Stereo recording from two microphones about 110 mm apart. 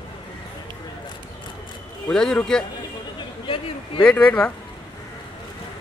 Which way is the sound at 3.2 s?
55° left (ahead or behind).